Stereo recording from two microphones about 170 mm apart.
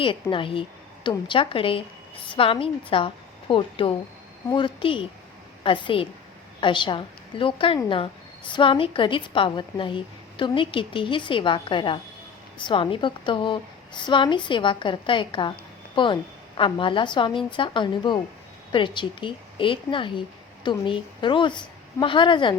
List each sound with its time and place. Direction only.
0.0 s a woman's voice: 30° left (ahead or behind)